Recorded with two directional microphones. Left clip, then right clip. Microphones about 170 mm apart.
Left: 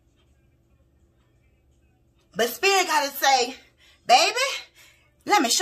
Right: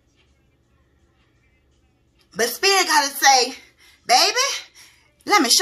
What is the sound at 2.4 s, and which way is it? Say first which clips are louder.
Speech: right 3 dB; 25° left (ahead or behind).